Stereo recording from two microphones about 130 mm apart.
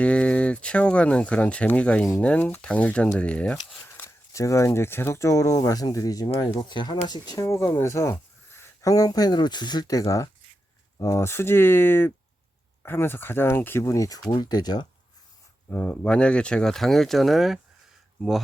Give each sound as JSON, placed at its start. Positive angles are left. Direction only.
{"t": 0.0, "sound": "speech", "side_deg": 10}
{"t": 15.7, "sound": "speech", "side_deg": 10}